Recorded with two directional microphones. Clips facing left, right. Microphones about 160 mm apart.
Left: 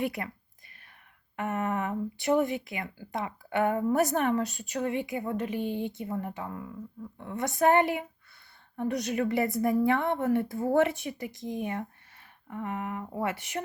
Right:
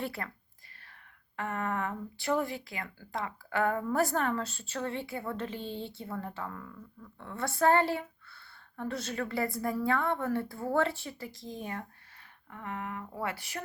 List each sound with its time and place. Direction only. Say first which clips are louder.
0.0 s speech: left 5 dB; 15° left (ahead or behind)
1.4 s speech: left 3 dB; 20° left (ahead or behind)